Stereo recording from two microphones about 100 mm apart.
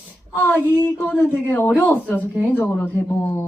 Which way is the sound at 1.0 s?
15° left (ahead or behind).